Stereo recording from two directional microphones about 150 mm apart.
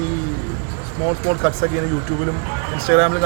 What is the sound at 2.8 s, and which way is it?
Speech, 10° left (ahead or behind).